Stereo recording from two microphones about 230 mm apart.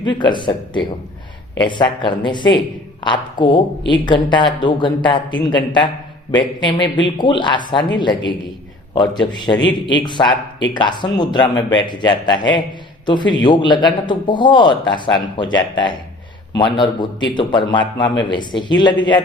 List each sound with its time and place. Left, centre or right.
0.0 s a man's voice: centre